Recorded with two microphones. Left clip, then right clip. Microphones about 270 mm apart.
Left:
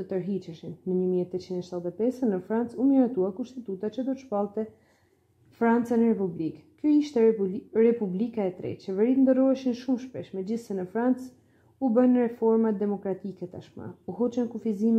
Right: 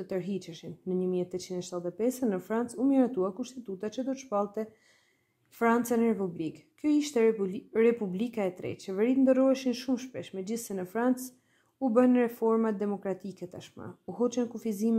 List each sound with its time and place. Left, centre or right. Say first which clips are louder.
0.0 s speech: left 3 dB; right